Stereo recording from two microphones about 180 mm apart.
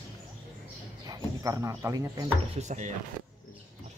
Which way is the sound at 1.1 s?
20° right (ahead or behind).